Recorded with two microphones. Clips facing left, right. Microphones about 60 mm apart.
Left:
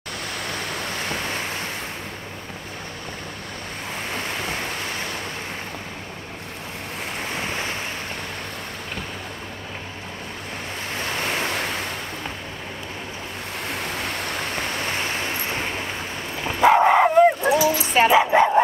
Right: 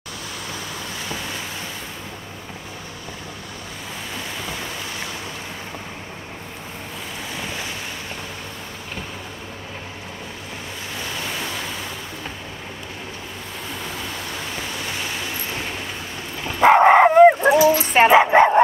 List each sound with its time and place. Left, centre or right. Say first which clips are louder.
0.5 s vehicle: left 3 dB; left
4.1 s waves: left 3 dB; left
7.3 s waves: left 2 dB; left
11.0 s waves: left 4 dB; left
13.7 s a sound: left 3 dB; left
16.6 s dog: right 3 dB; right